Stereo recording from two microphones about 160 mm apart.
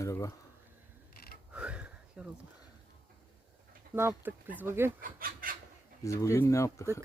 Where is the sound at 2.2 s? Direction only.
10° right (ahead or behind).